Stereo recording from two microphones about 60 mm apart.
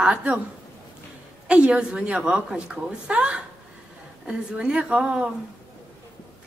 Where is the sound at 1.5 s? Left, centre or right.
Centre.